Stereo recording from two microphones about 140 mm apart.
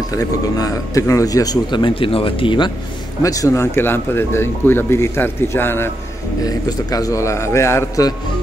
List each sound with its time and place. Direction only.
0.1 s speech: 25° left (ahead or behind)
3.2 s speech: 25° left (ahead or behind)